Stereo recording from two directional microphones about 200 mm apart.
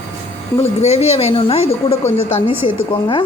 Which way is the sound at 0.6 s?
30° left (ahead or behind).